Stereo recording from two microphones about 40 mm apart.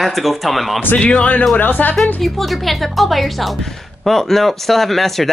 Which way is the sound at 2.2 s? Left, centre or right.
Centre.